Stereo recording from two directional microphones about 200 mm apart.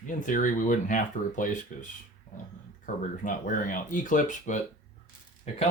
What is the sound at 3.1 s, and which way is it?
Speech, 40° left (ahead or behind).